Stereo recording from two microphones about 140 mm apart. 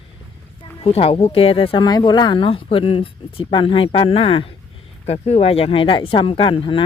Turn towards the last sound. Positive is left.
turn(degrees=40)  # may be behind; listen again after turning